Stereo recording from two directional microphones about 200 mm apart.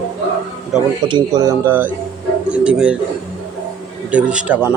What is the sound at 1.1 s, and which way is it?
A man's voice, 20° right (ahead or behind).